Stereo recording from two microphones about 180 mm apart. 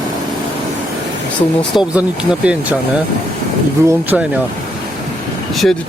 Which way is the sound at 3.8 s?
10° right (ahead or behind).